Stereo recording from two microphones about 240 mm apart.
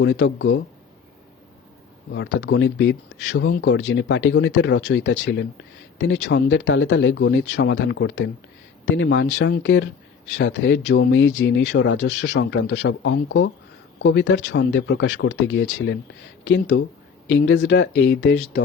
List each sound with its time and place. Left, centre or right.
0.0 s speech: left
2.1 s speech: left